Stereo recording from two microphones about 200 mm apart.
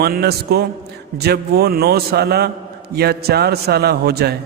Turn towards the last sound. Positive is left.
turn(degrees=-55)  # may be behind; listen again after turning